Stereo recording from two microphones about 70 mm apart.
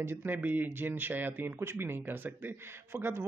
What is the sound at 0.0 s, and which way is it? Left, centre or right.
Speech, right.